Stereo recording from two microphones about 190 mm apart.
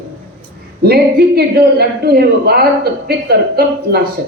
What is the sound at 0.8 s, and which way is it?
A man's voice, 55° right (ahead or behind).